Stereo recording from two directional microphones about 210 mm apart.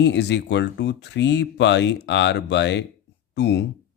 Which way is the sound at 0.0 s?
55° left (ahead or behind).